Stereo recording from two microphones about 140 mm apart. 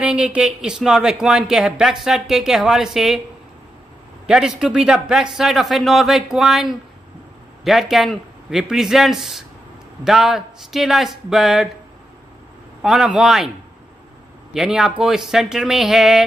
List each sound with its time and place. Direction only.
0.0 s speech: 5° right (ahead or behind)
4.3 s speech: 5° right (ahead or behind)
12.8 s speech: 5° right (ahead or behind)
14.5 s speech: 5° right (ahead or behind)